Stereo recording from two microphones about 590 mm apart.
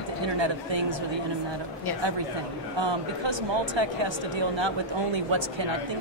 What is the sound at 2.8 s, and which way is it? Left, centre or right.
Speech, right.